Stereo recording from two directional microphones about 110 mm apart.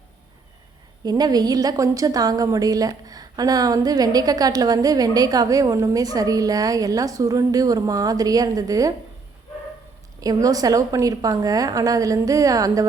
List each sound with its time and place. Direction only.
1.0 s a woman's voice: 35° right (ahead or behind)
10.2 s a woman's voice: 35° right (ahead or behind)